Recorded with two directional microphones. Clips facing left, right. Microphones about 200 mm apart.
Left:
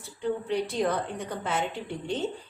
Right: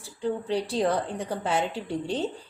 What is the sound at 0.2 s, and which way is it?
A woman's voice, 30° right (ahead or behind).